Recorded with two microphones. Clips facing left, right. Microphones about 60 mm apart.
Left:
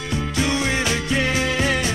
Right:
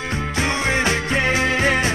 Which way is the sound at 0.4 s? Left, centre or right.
Right.